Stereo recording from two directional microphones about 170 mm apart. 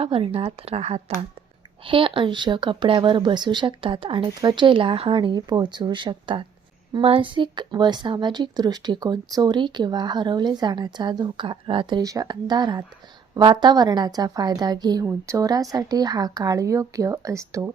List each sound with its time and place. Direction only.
0.0 s a woman's voice: 35° right (ahead or behind); by 17.7 s 20° right (ahead or behind)